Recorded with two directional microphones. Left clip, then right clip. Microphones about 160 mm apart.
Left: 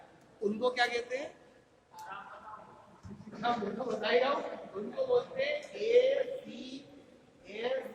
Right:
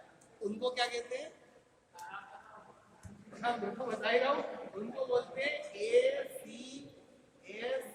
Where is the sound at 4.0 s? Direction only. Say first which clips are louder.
Left 2 dB; centre (ahead or behind).